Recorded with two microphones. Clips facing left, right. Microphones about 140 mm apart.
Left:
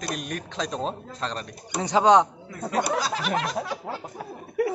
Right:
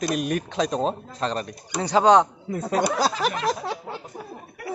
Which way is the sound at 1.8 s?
15° left (ahead or behind).